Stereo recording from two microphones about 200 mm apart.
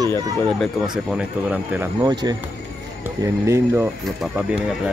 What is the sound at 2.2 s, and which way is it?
Speech, 20° right (ahead or behind).